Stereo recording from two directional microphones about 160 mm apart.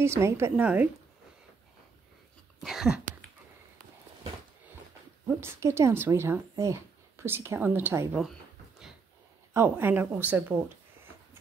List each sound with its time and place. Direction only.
0.0 s speech: 15° right (ahead or behind)
2.6 s a sound: 5° right (ahead or behind)
5.2 s speech: 15° right (ahead or behind)
9.5 s speech: 15° right (ahead or behind)